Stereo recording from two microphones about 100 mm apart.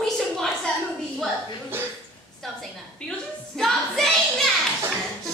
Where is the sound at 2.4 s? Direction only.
5° left (ahead or behind).